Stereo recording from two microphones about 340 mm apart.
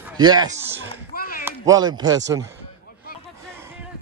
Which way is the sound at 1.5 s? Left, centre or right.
Centre.